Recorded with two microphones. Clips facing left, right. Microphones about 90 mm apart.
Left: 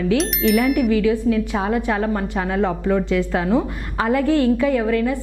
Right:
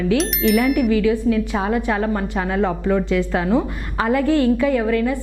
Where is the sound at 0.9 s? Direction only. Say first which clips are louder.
Even; 15° right (ahead or behind).